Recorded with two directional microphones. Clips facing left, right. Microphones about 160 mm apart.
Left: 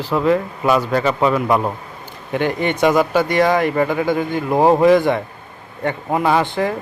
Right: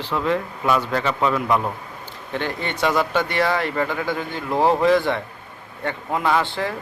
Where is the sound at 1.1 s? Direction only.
40° left (ahead or behind).